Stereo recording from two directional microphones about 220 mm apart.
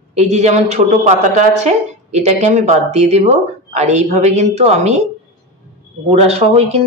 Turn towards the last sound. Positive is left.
turn(degrees=-30)  # may be behind; listen again after turning